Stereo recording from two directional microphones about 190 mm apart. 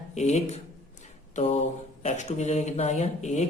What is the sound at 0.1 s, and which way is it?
Speech, 35° left (ahead or behind).